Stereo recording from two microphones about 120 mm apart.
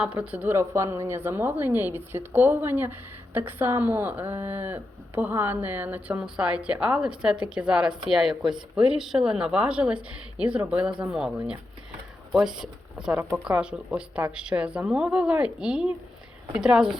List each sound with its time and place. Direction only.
0.0 s a woman's voice: 10° right (ahead or behind)